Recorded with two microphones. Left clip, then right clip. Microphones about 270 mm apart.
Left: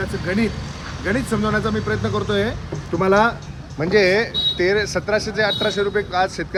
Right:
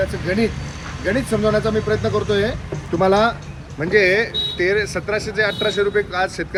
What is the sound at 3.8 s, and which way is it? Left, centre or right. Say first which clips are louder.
Speech: right 1 dB; left.